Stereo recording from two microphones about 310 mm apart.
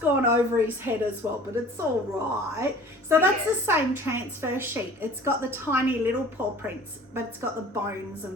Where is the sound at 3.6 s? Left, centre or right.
Centre.